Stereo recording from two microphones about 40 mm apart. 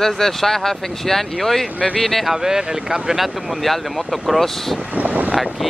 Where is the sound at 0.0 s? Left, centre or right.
Centre.